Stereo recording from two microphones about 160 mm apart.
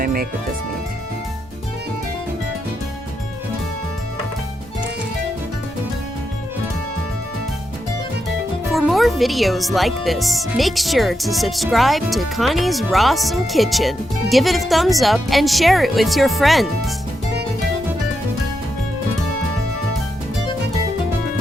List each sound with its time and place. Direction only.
0.0 s music: 65° right (ahead or behind)
8.7 s speech: centre (ahead or behind)